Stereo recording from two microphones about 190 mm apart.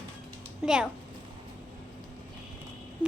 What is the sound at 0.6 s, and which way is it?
Child singing, 5° right (ahead or behind).